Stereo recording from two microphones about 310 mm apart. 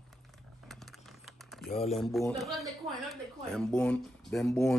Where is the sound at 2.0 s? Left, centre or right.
Centre.